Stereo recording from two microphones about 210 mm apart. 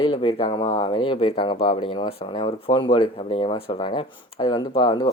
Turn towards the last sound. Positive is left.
turn(degrees=25)  # may be behind; listen again after turning